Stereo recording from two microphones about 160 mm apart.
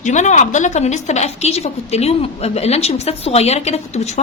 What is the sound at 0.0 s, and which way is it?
A woman's voice, 50° left (ahead or behind).